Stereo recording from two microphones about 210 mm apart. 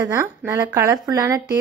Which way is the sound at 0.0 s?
10° right (ahead or behind).